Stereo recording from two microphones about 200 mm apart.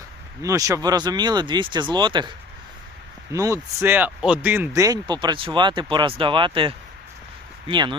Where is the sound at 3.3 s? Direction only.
15° right (ahead or behind).